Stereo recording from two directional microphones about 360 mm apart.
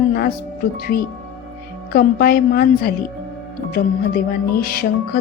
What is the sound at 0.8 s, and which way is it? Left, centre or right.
A woman's voice, left.